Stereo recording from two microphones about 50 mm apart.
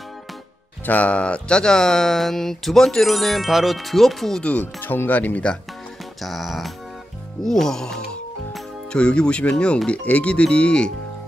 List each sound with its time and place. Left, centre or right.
0.8 s speech: left; by 4.4 s centre
4.4 s speech: left
4.8 s speech: left
6.2 s music: centre
7.4 s speech: centre